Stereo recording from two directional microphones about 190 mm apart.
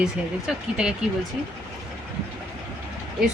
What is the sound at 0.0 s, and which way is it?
Speech, 5° right (ahead or behind).